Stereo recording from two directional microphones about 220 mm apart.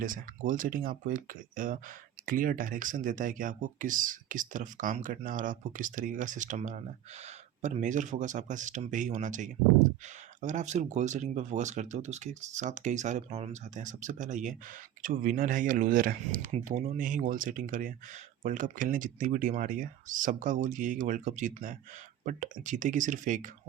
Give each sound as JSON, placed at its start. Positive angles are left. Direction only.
{"t": 0.0, "sound": "speech", "side_deg": -40}